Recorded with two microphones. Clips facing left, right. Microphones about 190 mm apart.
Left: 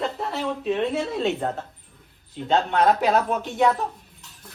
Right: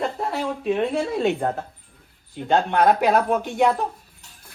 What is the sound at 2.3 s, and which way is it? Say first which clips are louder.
Speech: right 2 dB; 10° right (ahead or behind).